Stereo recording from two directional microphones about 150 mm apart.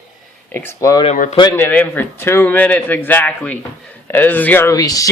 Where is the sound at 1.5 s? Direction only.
10° left (ahead or behind).